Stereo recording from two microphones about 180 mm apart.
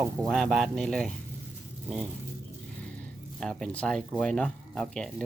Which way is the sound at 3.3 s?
5° left (ahead or behind).